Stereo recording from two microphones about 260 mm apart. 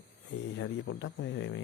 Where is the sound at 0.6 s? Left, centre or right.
Left.